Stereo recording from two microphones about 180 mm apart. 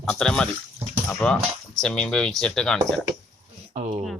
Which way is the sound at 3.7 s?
40° right (ahead or behind).